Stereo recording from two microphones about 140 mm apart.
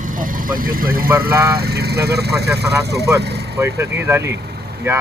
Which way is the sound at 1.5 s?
90° right.